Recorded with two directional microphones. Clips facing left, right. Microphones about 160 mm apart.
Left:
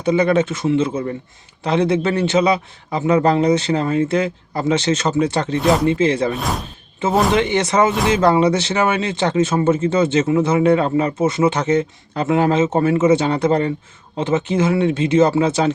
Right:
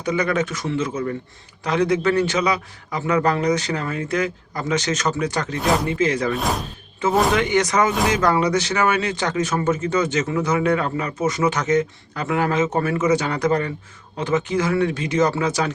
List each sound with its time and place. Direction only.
0.0 s speech: 25° left (ahead or behind)